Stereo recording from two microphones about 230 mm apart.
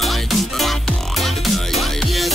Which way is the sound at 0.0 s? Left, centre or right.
Centre.